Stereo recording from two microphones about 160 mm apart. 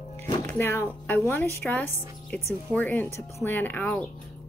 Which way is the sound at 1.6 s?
5° left (ahead or behind).